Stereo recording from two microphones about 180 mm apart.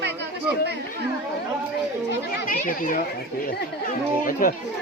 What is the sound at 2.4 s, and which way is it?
Speech, 50° left (ahead or behind).